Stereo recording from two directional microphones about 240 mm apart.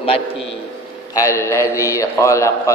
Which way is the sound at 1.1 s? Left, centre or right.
Centre.